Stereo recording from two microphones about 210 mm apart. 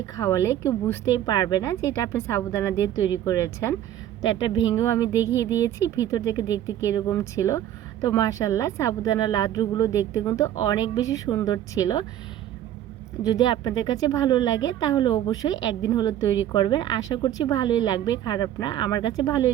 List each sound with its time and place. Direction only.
0.0 s a woman's voice: 15° left (ahead or behind)
13.2 s a woman's voice: 20° left (ahead or behind)